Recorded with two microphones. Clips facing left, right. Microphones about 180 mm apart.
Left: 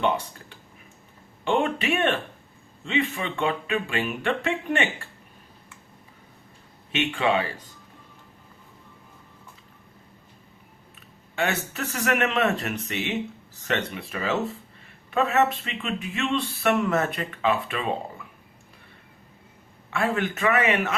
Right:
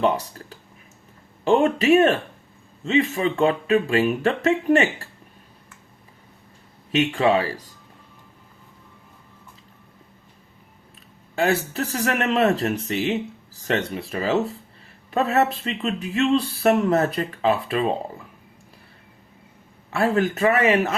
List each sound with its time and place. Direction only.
1.5 s speech: 40° right (ahead or behind)
6.9 s speech: 40° right (ahead or behind)
11.3 s speech: 35° right (ahead or behind)
19.9 s speech: 35° right (ahead or behind)